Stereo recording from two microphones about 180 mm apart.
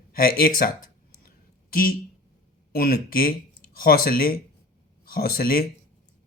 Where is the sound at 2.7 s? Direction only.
55° left (ahead or behind).